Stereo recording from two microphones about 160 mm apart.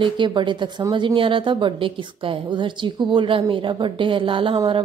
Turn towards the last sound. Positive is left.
turn(degrees=-35)  # may be behind; listen again after turning